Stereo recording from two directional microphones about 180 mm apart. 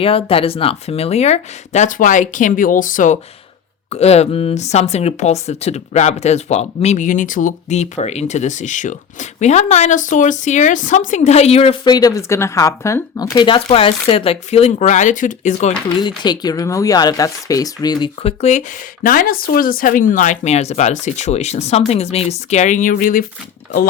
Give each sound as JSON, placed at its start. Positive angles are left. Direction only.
{"t": 0.0, "sound": "speech", "side_deg": 30}
{"t": 3.8, "sound": "speech", "side_deg": 35}
{"t": 16.0, "sound": "speech", "side_deg": 25}